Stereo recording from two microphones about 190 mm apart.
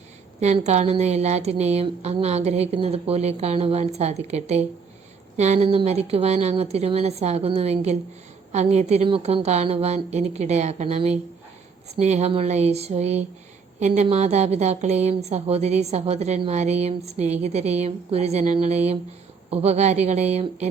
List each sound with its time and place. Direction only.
0.3 s a woman's voice: 35° right (ahead or behind)